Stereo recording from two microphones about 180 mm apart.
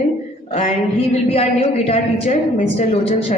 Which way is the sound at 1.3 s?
35° left (ahead or behind).